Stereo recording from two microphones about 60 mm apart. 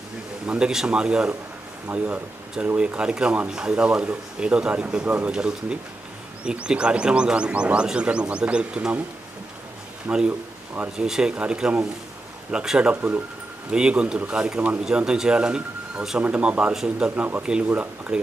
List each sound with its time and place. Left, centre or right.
0.4 s speech: centre
1.9 s speech: right
10.1 s speech: centre
12.9 s speech: right
13.7 s speech: centre